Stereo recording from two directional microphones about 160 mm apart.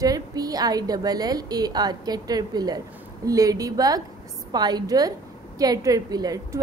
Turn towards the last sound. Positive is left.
turn(degrees=-25)  # may be behind; listen again after turning